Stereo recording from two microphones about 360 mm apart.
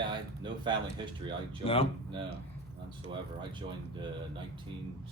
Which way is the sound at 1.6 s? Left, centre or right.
Centre.